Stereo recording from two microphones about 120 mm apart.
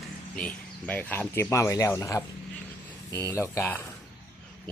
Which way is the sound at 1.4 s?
25° left (ahead or behind).